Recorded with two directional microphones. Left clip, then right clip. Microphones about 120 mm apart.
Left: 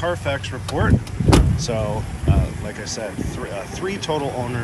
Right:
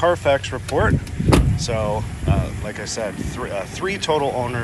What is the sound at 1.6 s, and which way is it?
Speech, 30° left (ahead or behind).